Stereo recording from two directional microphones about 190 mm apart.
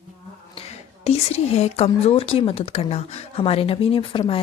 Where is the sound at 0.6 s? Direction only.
35° left (ahead or behind).